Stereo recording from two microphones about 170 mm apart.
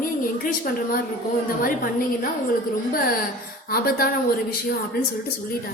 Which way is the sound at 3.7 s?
60° left (ahead or behind).